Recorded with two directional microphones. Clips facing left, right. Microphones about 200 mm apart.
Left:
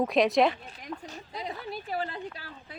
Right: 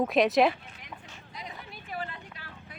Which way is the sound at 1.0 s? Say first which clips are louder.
Left 7 dB; 35° left (ahead or behind).